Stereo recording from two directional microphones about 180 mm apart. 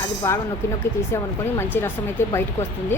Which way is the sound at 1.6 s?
10° left (ahead or behind).